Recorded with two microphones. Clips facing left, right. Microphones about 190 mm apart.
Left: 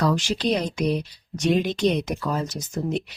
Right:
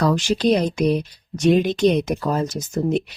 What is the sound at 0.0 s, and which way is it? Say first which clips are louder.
Speech: right 4 dB; 50° right (ahead or behind).